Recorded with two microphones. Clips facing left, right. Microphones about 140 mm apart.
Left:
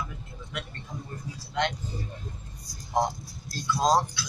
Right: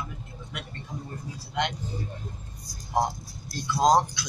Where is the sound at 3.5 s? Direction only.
20° right (ahead or behind).